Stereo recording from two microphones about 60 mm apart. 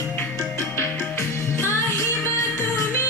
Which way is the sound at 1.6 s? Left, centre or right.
Left.